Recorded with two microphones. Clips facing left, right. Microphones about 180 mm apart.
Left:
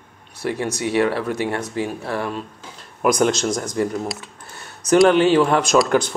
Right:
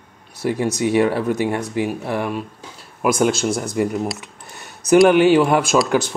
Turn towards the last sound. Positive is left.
turn(degrees=-5)  # may be behind; listen again after turning